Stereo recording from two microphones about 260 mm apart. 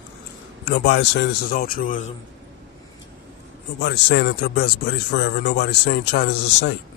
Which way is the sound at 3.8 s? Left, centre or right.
Left.